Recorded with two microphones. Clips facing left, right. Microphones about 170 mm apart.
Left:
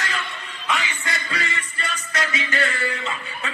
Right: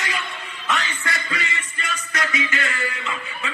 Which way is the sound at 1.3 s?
30° left (ahead or behind).